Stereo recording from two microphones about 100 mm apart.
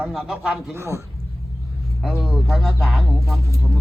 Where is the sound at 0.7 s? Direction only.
25° right (ahead or behind).